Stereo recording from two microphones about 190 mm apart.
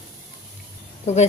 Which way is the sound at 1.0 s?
35° left (ahead or behind).